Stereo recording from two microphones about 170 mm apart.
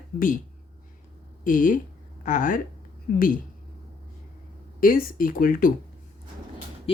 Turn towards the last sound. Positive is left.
turn(degrees=55)  # may be behind; listen again after turning